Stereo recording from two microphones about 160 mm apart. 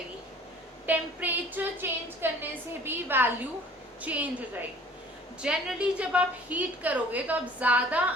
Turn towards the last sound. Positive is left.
turn(degrees=-10)  # may be behind; listen again after turning